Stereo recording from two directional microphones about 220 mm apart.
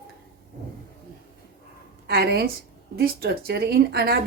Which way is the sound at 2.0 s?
45° right (ahead or behind).